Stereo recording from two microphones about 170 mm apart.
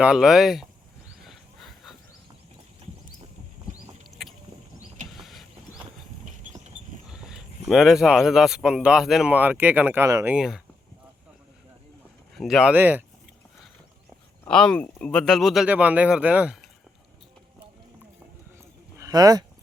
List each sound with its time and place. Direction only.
0.0 s speech: 5° right (ahead or behind)
1.3 s a sound: centre (ahead or behind)
4.2 s boat: centre (ahead or behind)
5.1 s mechanisms: centre (ahead or behind)
7.1 s speech: 5° right (ahead or behind)
10.2 s speech: 5° right (ahead or behind)
12.4 s speech: centre (ahead or behind)
14.4 s speech: 5° left (ahead or behind)
18.9 s a sound: 20° right (ahead or behind)